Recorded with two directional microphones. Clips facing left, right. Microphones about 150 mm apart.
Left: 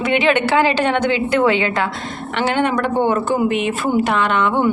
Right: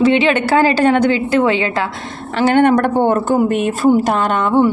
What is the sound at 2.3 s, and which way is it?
Speech, 45° right (ahead or behind).